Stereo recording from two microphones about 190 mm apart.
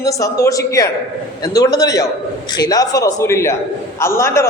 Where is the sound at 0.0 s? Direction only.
15° left (ahead or behind).